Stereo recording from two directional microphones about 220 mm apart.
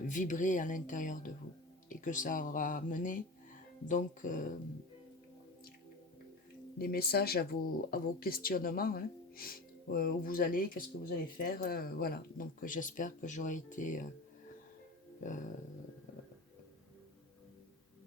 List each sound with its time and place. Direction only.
0.1 s speech: 35° left (ahead or behind)
6.7 s speech: 45° left (ahead or behind)
15.2 s speech: 35° left (ahead or behind)